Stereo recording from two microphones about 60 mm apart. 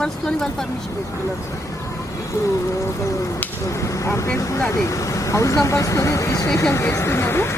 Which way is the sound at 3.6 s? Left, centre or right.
Left.